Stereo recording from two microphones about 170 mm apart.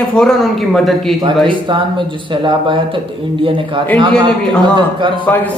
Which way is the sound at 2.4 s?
30° right (ahead or behind).